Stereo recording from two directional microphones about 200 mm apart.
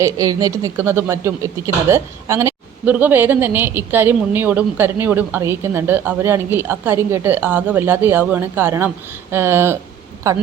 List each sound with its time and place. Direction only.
0.0 s speech: 15° right (ahead or behind)